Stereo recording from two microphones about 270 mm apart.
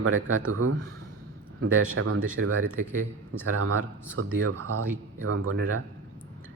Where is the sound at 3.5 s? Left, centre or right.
Right.